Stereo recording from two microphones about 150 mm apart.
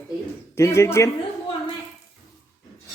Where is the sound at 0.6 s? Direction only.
20° left (ahead or behind).